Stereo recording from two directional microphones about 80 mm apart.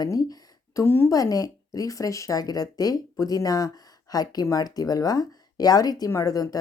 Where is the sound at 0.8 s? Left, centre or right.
Left.